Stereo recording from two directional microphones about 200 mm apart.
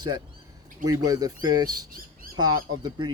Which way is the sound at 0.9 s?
15° right (ahead or behind).